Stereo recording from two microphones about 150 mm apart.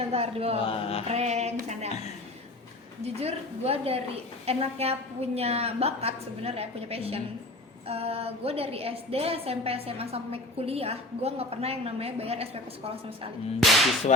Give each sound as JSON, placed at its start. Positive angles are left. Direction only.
{"t": 0.1, "sound": "a woman's voice", "side_deg": -40}
{"t": 0.7, "sound": "chant", "side_deg": 40}
{"t": 1.0, "sound": "a sound", "side_deg": -45}
{"t": 3.0, "sound": "a woman's voice", "side_deg": -45}
{"t": 13.6, "sound": "whip", "side_deg": 0}